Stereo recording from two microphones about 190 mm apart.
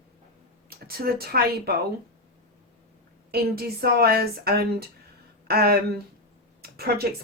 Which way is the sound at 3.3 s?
55° right (ahead or behind).